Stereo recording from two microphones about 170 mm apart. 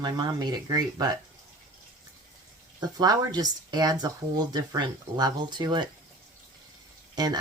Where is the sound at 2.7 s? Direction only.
25° right (ahead or behind).